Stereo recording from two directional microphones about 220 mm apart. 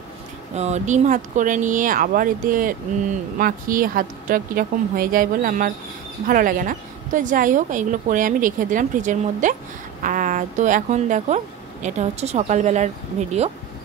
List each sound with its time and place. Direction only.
0.6 s speech: 30° right (ahead or behind)